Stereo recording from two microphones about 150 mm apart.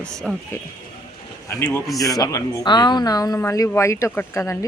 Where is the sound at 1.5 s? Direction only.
20° left (ahead or behind).